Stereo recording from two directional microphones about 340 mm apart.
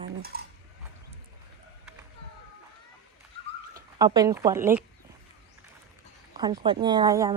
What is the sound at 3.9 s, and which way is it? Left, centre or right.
Speech, centre.